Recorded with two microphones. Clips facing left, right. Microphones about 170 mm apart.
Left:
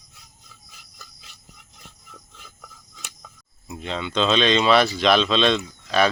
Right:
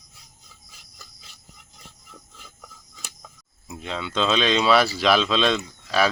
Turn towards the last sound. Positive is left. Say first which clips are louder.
# left 2 dB
turn(degrees=-5)  # may be behind; listen again after turning